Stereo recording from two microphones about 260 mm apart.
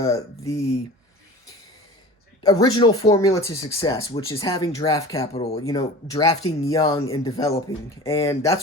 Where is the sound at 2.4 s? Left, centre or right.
Centre.